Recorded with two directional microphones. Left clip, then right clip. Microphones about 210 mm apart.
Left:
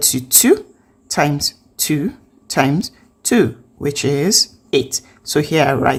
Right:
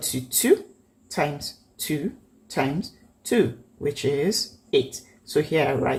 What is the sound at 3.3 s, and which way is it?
A woman's voice, 35° left (ahead or behind).